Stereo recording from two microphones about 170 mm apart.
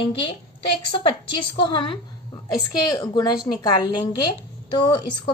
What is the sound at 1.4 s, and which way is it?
A woman's voice, 30° left (ahead or behind).